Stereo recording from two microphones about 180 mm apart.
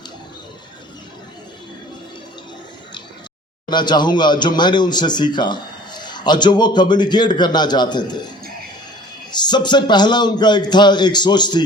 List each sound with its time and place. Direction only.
3.7 s speech: 25° left (ahead or behind)
9.3 s speech: 25° left (ahead or behind)